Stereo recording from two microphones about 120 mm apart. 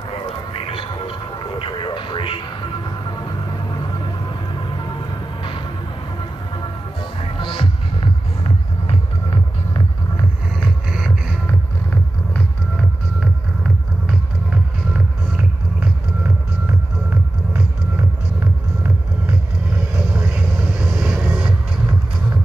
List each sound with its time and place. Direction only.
0.1 s a sound: 50° left (ahead or behind)
3.8 s music: 40° left (ahead or behind)
10.6 s music: 5° right (ahead or behind)
11.4 s music: 10° left (ahead or behind)
14.0 s music: 10° right (ahead or behind)
20.1 s vehicle: 20° right (ahead or behind)